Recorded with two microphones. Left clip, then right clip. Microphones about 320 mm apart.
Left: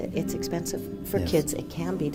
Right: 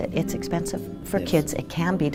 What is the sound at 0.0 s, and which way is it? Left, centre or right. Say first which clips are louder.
Speech: right 3 dB; right.